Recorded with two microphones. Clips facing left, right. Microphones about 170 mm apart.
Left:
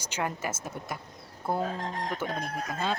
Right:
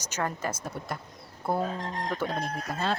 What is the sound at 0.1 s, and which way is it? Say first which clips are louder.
Speech: right 1 dB; 15° left (ahead or behind).